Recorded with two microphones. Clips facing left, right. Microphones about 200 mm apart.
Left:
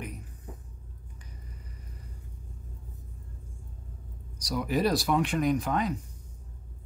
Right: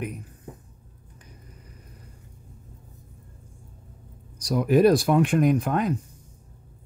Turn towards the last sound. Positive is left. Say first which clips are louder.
# right 4 dB
turn(degrees=-55)  # may be behind; listen again after turning